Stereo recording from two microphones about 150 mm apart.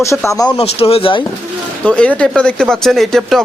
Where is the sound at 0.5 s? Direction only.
40° left (ahead or behind).